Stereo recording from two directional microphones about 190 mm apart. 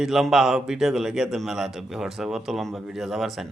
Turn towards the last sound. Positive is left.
turn(degrees=0)  # may be behind; listen again after turning